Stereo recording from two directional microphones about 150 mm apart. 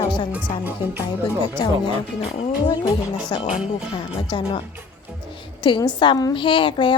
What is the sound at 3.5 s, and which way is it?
Speech, 5° right (ahead or behind).